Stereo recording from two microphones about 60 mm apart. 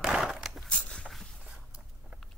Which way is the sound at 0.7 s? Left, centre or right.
Left.